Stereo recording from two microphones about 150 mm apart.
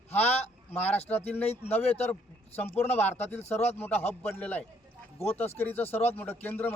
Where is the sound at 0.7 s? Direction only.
10° left (ahead or behind).